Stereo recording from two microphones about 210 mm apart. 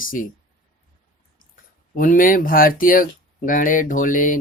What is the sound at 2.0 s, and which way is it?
Speech, 40° left (ahead or behind).